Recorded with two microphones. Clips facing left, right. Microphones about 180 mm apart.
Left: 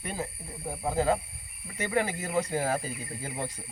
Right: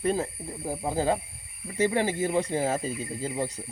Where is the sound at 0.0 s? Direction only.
35° right (ahead or behind).